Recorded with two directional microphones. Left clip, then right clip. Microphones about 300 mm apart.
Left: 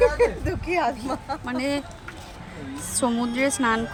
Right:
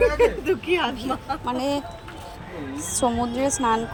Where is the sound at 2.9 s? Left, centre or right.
Centre.